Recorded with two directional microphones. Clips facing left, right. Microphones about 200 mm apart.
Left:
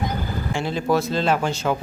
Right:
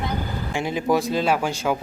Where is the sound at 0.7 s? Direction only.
15° right (ahead or behind).